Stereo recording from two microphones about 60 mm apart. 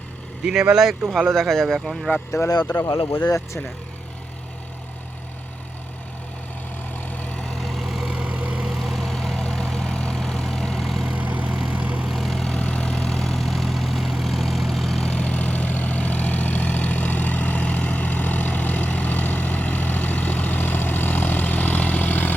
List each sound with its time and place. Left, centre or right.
0.4 s speech: centre
0.8 s speech: centre
2.3 s speech: left
7.6 s vehicle: centre
8.1 s vehicle: centre
8.6 s vehicle: centre
11.2 s vehicle: right
12.0 s vehicle: centre
12.5 s vehicle: centre
15.1 s vehicle: left